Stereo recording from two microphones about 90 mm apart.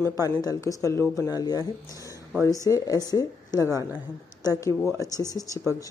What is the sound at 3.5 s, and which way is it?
Speech, 30° right (ahead or behind).